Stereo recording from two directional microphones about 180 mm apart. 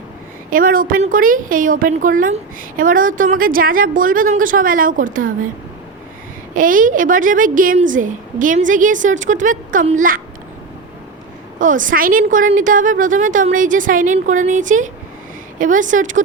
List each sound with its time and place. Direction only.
0.5 s a woman's voice: 50° right (ahead or behind)
6.5 s a woman's voice: 50° right (ahead or behind)
11.6 s a woman's voice: 45° right (ahead or behind)